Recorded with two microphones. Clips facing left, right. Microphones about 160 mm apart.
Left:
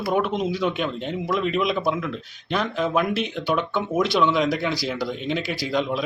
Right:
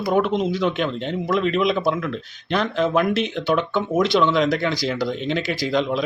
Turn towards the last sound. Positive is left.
turn(degrees=5)  # may be behind; listen again after turning